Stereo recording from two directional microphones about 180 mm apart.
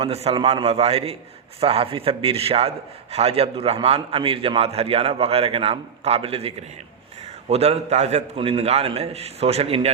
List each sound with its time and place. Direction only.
0.0 s a man's voice: 35° right (ahead or behind)